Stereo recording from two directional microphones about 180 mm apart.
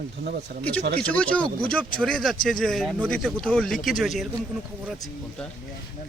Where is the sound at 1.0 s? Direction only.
5° left (ahead or behind).